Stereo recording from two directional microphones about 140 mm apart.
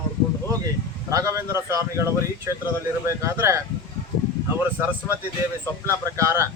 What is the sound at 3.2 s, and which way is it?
Speech, 20° right (ahead or behind).